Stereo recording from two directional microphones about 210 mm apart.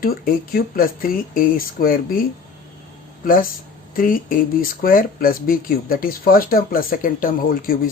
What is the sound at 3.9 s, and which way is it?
Speech, 40° left (ahead or behind).